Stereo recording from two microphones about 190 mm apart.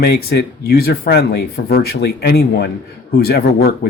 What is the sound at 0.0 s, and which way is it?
Speech, 60° left (ahead or behind).